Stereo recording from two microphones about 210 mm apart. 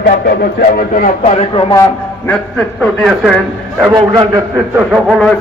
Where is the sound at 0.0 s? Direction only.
45° left (ahead or behind).